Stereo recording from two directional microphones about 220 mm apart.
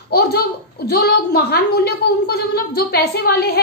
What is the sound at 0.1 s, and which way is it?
A child's voice, 45° left (ahead or behind).